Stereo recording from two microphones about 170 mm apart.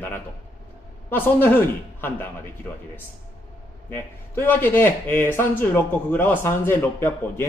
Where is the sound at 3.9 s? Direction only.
10° left (ahead or behind).